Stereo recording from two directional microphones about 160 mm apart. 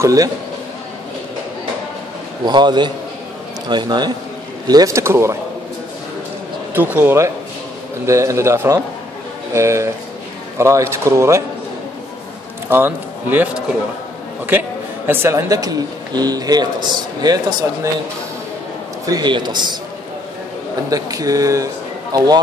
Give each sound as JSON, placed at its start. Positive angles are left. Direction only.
{"t": 0.0, "sound": "speech", "side_deg": -20}
{"t": 2.4, "sound": "speech", "side_deg": -25}
{"t": 6.7, "sound": "speech", "side_deg": -10}
{"t": 12.6, "sound": "speech", "side_deg": -15}
{"t": 14.5, "sound": "speech", "side_deg": -10}
{"t": 19.0, "sound": "speech", "side_deg": -25}
{"t": 20.9, "sound": "speech", "side_deg": -20}